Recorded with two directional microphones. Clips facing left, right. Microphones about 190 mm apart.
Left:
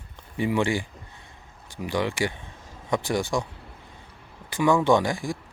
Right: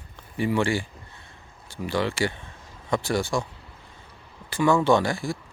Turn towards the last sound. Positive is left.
turn(degrees=15)  # may be behind; listen again after turning